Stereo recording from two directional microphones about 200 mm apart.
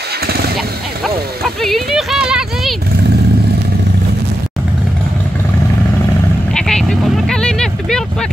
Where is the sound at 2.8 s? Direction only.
55° right (ahead or behind).